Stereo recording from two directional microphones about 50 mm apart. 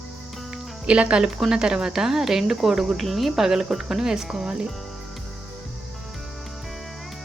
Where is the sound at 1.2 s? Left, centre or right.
Centre.